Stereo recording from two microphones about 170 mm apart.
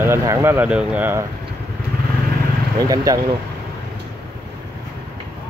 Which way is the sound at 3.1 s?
20° right (ahead or behind).